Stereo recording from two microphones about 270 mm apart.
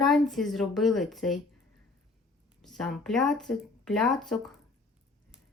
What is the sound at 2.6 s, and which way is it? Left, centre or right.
Speech, centre.